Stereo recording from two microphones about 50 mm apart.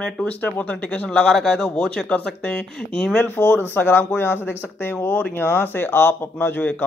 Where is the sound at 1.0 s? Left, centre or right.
Centre.